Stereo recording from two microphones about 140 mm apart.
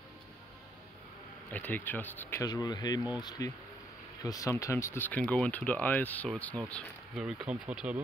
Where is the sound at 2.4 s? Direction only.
30° left (ahead or behind).